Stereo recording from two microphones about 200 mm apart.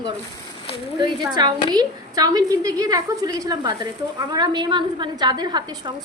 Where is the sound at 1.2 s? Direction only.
20° right (ahead or behind).